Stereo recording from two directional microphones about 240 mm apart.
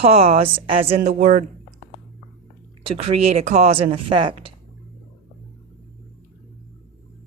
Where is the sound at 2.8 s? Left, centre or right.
Right.